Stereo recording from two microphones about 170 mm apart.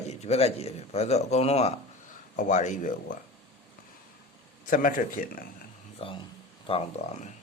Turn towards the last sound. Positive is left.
turn(degrees=35)  # may be behind; listen again after turning